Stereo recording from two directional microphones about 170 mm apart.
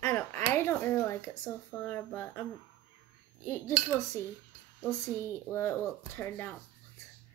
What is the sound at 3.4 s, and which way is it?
Speech, 15° left (ahead or behind).